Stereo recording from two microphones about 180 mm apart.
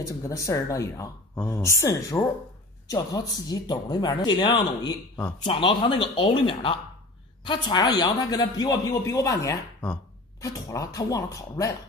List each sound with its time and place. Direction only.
0.0 s a man's voice: 15° left (ahead or behind)